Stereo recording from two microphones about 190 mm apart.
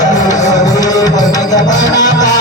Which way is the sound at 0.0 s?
20° left (ahead or behind).